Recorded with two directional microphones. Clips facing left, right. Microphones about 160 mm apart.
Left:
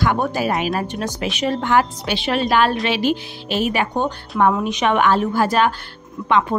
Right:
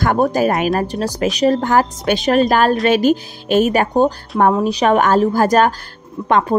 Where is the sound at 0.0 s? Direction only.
45° right (ahead or behind).